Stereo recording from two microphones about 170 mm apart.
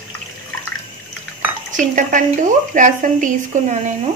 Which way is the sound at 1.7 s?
50° right (ahead or behind).